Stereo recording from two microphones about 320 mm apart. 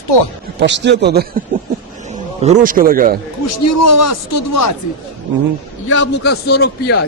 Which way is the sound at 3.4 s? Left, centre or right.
Left.